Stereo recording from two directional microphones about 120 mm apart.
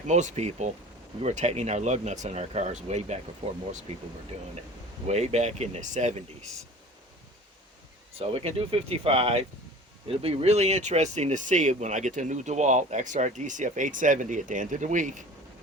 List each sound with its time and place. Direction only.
0.1 s speech: 80° right
5.0 s speech: 65° right (ahead or behind); by 6.2 s 80° right
8.2 s speech: 55° right (ahead or behind); by 15.2 s 90° right